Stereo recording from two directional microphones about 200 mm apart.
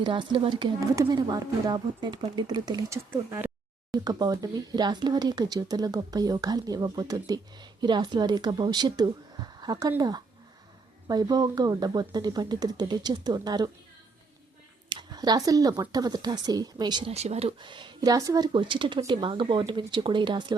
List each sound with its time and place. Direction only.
0.0 s speech: 25° right (ahead or behind)
14.8 s speech: 20° right (ahead or behind)